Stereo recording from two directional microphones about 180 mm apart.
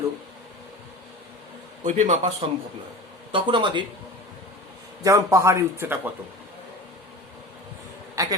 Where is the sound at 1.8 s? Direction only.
45° right (ahead or behind).